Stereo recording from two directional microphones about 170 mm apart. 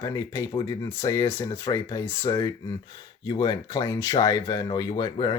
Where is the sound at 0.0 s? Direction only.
20° left (ahead or behind).